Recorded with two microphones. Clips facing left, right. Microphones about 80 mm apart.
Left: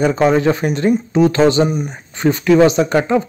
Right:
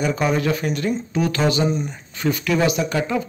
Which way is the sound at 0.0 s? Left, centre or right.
Left.